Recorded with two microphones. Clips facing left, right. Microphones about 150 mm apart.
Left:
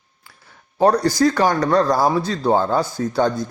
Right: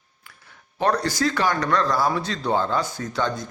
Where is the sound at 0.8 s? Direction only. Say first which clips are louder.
Left 7 dB; 35° left (ahead or behind).